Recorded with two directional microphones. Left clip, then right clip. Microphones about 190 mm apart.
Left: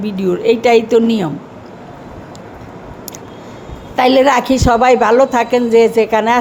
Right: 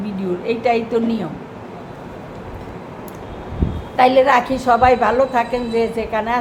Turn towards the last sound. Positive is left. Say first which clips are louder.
# left 8 dB
turn(degrees=55)  # may be behind; listen again after turning